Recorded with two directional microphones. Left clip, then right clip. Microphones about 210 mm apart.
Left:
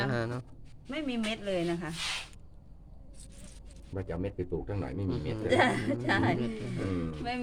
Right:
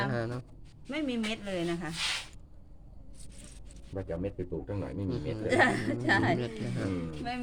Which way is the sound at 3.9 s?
50° left (ahead or behind).